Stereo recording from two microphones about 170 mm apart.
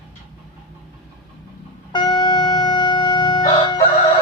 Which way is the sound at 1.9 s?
25° left (ahead or behind).